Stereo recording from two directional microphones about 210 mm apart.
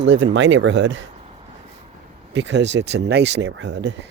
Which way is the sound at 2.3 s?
55° right (ahead or behind).